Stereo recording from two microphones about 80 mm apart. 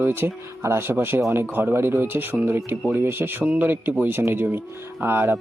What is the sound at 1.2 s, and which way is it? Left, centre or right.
Speech, right.